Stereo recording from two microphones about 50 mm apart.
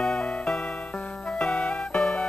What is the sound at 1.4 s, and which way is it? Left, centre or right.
Music, left.